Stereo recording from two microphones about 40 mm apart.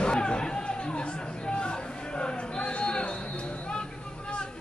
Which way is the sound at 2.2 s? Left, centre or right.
Left.